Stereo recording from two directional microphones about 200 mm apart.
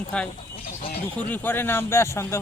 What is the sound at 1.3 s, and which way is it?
A man's voice, 10° left (ahead or behind).